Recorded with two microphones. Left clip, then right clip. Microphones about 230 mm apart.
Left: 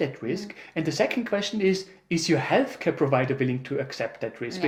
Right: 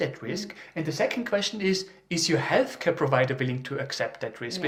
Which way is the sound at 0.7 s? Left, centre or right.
Right.